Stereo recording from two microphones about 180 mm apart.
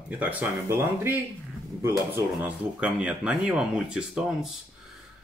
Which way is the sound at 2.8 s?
5° right (ahead or behind).